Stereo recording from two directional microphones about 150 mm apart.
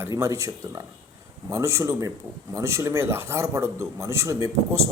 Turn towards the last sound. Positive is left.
turn(degrees=-20)  # may be behind; listen again after turning